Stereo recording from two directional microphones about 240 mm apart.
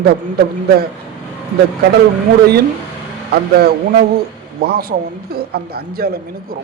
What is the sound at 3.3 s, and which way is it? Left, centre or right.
Speech, right.